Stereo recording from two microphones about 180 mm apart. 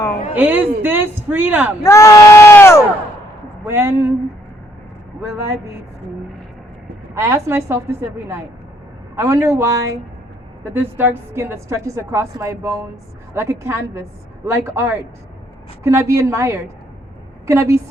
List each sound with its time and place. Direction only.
0.3 s a woman's voice: 10° right (ahead or behind)
1.8 s crowd: 15° left (ahead or behind)
3.7 s a woman's voice: 15° right (ahead or behind)
5.2 s a woman's voice: 15° right (ahead or behind)
7.1 s a woman's voice: 15° right (ahead or behind)